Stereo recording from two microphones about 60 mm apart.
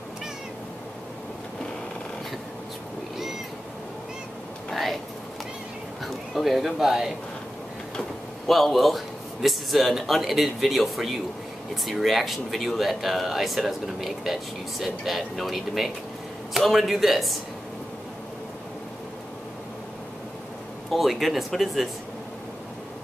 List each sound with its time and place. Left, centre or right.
4.6 s a sound: centre
6.3 s speech: centre
8.5 s speech: centre
20.9 s speech: centre